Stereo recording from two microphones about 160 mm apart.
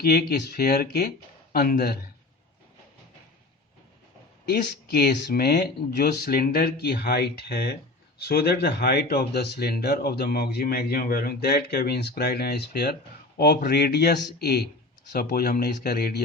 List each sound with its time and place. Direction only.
0.0 s speech: 75° left (ahead or behind)
4.4 s speech: 90° left